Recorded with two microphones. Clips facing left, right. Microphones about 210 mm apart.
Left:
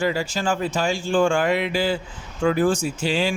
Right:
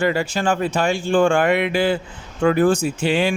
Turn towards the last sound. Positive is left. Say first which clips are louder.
# right 4 dB
turn(degrees=-60)  # may be behind; listen again after turning